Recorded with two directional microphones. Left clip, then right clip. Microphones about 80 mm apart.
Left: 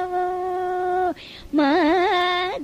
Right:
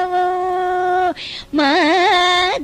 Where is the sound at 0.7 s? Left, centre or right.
Left.